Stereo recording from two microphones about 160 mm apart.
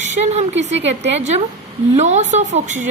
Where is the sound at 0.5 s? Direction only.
90° right.